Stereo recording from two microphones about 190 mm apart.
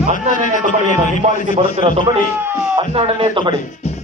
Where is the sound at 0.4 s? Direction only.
40° left (ahead or behind).